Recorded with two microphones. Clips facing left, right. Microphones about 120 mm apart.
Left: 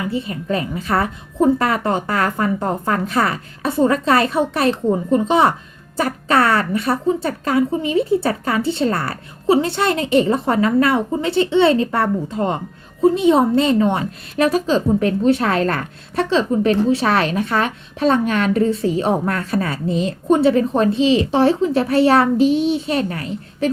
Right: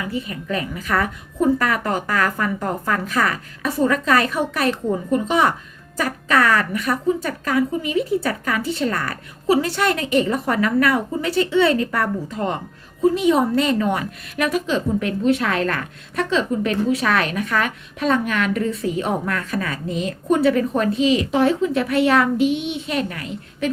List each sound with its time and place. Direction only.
0.0 s a woman's voice: 30° left (ahead or behind)